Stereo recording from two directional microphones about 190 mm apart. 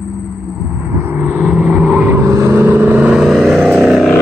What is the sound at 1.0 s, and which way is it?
Vehicle, 10° right (ahead or behind).